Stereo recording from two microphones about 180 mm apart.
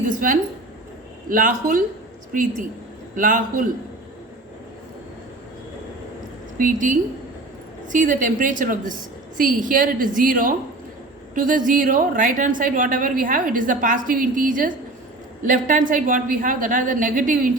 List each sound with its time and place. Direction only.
1.3 s a woman's voice: 45° right (ahead or behind)
6.6 s a woman's voice: 50° right (ahead or behind)